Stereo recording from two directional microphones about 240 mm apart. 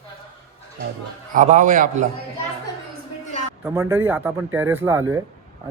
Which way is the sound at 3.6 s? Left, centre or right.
Centre.